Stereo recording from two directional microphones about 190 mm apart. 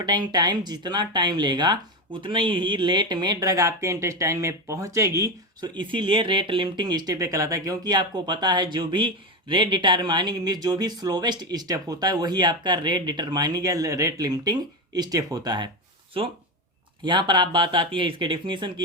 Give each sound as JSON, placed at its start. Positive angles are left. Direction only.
{"t": 0.0, "sound": "speech", "side_deg": -20}
{"t": 17.0, "sound": "speech", "side_deg": -25}